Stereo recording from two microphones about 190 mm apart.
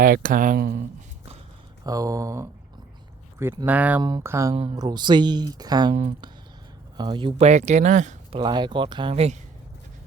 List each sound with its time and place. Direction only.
0.0 s speech: 45° right (ahead or behind)
1.8 s speech: 20° right (ahead or behind)
5.9 s speech: 40° right (ahead or behind)
6.9 s speech: 25° right (ahead or behind); by 8.4 s 40° right (ahead or behind)
8.4 s speech: 25° right (ahead or behind)